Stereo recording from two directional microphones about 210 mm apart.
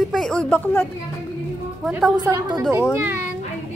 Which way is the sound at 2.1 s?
20° right (ahead or behind).